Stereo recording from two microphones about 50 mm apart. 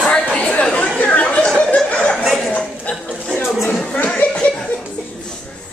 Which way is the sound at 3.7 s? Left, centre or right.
Centre.